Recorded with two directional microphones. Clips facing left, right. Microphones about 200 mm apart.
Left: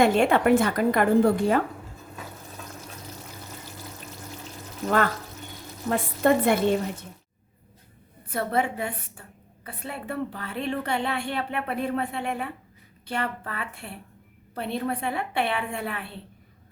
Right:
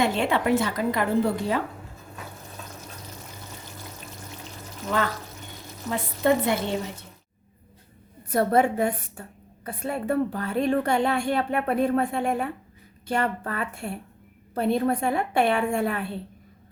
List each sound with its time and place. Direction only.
0.0 s a woman's voice: 50° left (ahead or behind)
5.9 s a woman's voice: 50° left (ahead or behind)
8.3 s a woman's voice: 45° right (ahead or behind)